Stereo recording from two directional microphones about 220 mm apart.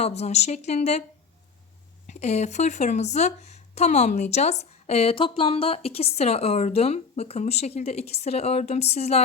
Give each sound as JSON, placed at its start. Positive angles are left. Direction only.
{"t": 0.0, "sound": "speech", "side_deg": 30}
{"t": 2.0, "sound": "speech", "side_deg": 30}